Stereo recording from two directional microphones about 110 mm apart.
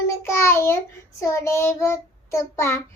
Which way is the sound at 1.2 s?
25° left (ahead or behind).